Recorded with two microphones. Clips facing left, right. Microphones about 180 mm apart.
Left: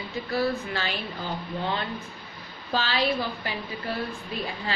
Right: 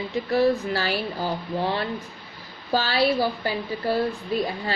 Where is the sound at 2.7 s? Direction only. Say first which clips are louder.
Right 4 dB; 40° right (ahead or behind).